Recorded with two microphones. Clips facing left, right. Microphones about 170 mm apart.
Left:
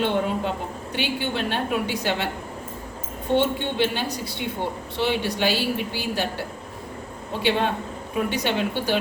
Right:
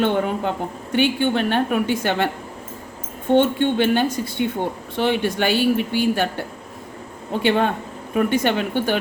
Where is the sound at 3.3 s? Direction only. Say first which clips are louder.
Right 5 dB; 55° right (ahead or behind).